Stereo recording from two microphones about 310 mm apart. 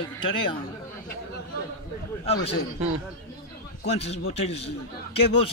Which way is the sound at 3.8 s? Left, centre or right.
Centre.